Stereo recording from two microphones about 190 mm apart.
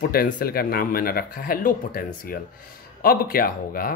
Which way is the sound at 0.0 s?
50° left (ahead or behind).